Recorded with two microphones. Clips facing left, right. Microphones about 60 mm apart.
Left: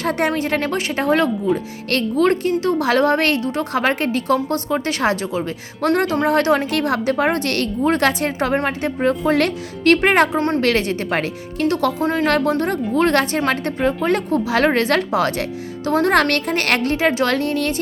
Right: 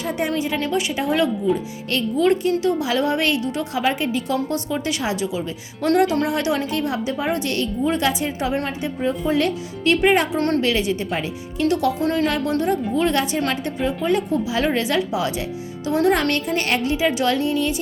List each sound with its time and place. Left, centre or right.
0.0 s a woman's voice: left
6.7 s a woman's voice: left
10.3 s a woman's voice: left
10.6 s a woman's voice: left
11.6 s a woman's voice: left
16.3 s a woman's voice: left